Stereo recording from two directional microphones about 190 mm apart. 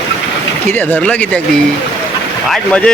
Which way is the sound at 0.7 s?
10° left (ahead or behind).